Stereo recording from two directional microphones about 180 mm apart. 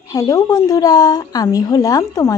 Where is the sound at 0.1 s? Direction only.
20° left (ahead or behind).